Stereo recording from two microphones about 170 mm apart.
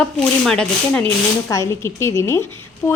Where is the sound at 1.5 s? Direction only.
20° left (ahead or behind).